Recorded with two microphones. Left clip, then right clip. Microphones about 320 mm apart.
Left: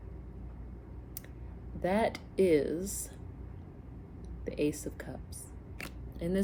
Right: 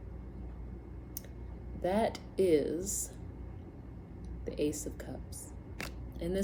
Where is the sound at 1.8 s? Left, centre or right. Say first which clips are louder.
Left 1 dB; centre.